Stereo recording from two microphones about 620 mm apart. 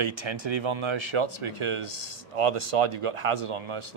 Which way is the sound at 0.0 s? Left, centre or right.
Right.